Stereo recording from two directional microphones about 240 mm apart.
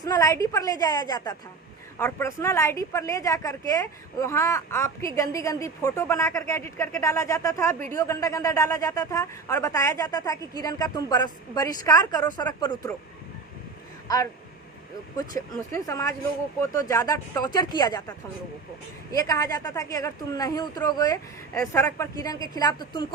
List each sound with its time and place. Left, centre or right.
0.0 s a man's voice: centre
15.1 s a man's voice: centre
19.1 s a man's voice: centre